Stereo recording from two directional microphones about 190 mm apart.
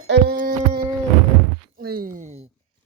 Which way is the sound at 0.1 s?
55° right (ahead or behind).